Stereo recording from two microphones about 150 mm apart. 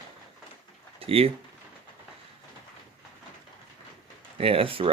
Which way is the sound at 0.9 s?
40° right (ahead or behind).